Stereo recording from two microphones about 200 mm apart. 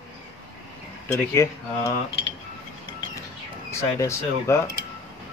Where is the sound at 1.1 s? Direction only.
15° left (ahead or behind).